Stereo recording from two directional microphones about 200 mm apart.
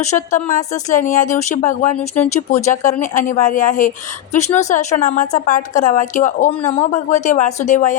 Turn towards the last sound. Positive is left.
turn(degrees=40)  # may be behind; listen again after turning